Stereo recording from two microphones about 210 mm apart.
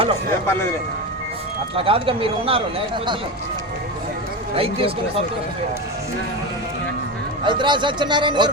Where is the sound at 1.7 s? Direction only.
25° right (ahead or behind).